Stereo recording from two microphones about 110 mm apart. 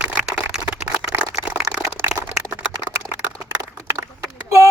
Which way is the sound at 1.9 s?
20° right (ahead or behind).